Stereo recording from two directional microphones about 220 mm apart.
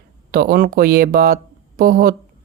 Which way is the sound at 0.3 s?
40° right (ahead or behind).